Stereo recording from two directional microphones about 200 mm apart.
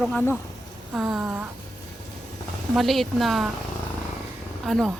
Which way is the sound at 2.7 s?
Centre (ahead or behind).